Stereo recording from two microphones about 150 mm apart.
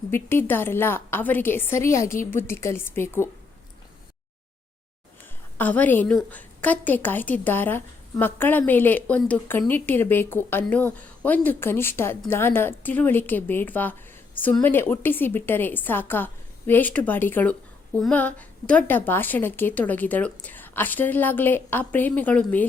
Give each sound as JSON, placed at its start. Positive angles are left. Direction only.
{"t": 0.1, "sound": "a woman's voice", "side_deg": 15}
{"t": 5.5, "sound": "a woman's voice", "side_deg": 10}